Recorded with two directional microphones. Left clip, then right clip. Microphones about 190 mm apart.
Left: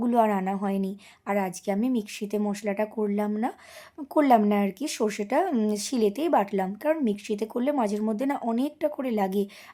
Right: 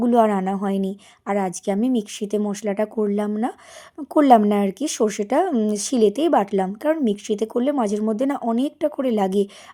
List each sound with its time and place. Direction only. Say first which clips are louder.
0.0 s speech: right 6 dB; 25° right (ahead or behind)